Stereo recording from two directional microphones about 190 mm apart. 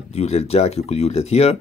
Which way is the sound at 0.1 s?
35° left (ahead or behind).